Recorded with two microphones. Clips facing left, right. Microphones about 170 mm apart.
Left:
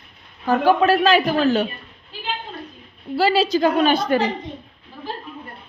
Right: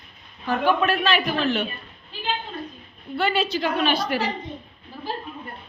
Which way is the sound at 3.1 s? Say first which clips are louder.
Left 6 dB; 30° left (ahead or behind).